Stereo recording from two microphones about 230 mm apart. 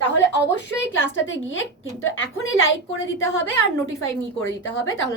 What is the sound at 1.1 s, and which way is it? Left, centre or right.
A woman's voice, left.